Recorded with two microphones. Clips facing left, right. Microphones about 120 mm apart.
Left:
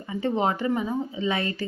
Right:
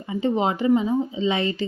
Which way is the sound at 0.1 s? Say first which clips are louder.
Right 2 dB; 15° right (ahead or behind).